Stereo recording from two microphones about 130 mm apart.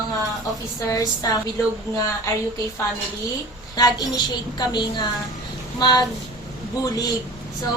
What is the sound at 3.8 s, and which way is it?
A woman's voice, 30° left (ahead or behind).